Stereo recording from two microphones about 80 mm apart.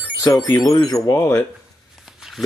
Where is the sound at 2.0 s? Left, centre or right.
Centre.